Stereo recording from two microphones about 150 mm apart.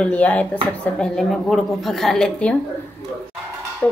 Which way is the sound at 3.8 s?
10° left (ahead or behind).